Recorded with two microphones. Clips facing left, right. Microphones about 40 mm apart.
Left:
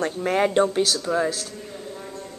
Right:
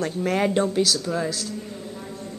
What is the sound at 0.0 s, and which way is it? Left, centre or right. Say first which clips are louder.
Speech: left 1 dB; centre.